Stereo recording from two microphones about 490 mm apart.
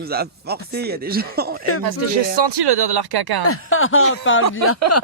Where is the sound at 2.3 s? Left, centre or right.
Right.